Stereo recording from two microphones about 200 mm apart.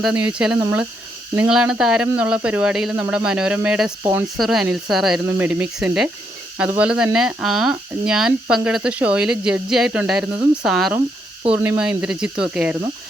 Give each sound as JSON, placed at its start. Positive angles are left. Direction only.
{"t": 0.3, "sound": "speech", "side_deg": -5}